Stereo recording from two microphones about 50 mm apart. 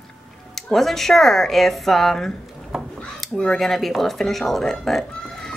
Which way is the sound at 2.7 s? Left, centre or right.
Centre.